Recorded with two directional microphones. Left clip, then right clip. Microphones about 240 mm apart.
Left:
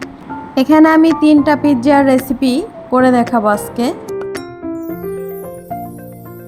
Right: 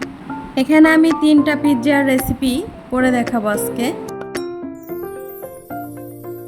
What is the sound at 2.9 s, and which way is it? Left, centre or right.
Speech, centre.